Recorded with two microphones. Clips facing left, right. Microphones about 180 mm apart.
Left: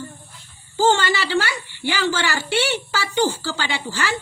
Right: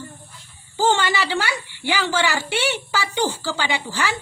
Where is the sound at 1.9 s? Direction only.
15° right (ahead or behind).